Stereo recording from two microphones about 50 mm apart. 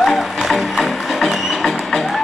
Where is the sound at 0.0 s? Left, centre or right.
Centre.